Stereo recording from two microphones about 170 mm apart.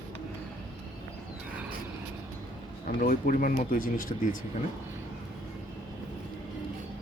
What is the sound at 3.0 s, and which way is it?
Speech, 55° left (ahead or behind).